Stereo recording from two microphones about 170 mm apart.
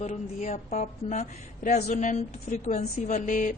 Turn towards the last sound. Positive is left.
turn(degrees=50)  # may be behind; listen again after turning